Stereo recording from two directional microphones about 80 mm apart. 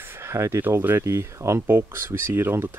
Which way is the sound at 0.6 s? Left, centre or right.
Right.